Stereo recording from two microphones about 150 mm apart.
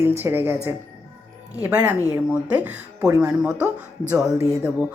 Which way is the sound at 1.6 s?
10° right (ahead or behind).